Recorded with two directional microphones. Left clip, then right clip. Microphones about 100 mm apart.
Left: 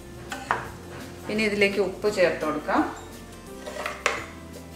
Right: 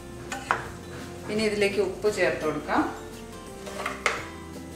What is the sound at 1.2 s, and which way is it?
Speech, 30° left (ahead or behind).